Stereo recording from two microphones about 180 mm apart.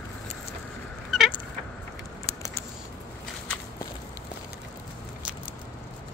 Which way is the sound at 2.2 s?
15° left (ahead or behind).